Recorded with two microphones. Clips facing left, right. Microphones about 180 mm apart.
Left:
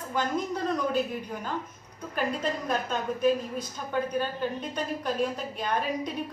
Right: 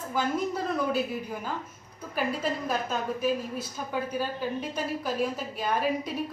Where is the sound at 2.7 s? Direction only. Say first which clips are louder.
Even; 5° right (ahead or behind).